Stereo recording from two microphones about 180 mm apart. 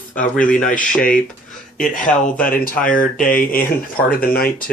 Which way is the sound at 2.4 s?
50° left (ahead or behind).